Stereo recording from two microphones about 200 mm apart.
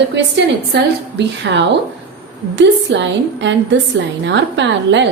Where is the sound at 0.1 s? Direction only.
65° right (ahead or behind).